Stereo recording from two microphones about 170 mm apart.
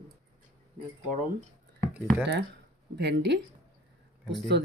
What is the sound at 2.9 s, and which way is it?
Speech, 85° right.